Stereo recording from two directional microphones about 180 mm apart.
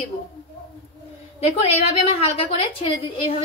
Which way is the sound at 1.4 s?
35° left (ahead or behind).